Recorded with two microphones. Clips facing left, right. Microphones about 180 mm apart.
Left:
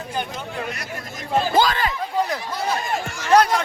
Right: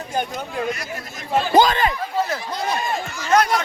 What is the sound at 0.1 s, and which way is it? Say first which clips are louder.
Speech: right 4 dB; 45° right (ahead or behind).